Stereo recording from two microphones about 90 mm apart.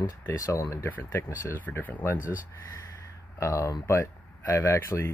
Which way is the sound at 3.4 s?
35° left (ahead or behind).